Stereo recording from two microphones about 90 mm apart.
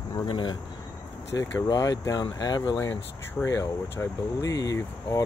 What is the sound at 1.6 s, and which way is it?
Speech, 50° left (ahead or behind).